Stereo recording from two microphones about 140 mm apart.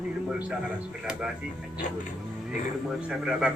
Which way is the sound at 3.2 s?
5° right (ahead or behind).